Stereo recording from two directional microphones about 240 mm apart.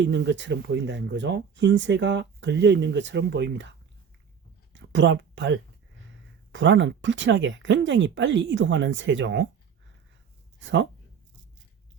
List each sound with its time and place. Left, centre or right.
0.0 s speech: right
4.7 s speech: right
10.6 s speech: right